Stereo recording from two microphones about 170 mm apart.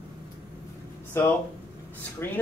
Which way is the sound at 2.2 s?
15° left (ahead or behind).